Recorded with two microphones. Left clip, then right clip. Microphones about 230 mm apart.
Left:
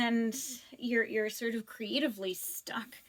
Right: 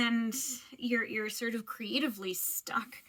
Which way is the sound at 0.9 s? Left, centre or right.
Right.